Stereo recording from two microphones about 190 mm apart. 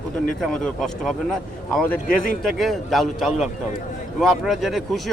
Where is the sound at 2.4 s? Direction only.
Centre (ahead or behind).